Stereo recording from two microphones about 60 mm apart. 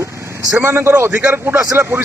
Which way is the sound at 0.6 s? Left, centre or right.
Right.